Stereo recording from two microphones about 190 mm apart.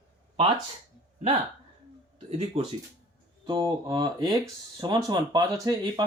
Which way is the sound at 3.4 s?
25° right (ahead or behind).